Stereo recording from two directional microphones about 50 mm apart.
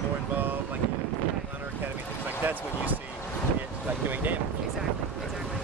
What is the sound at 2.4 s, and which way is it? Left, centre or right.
Speech, right.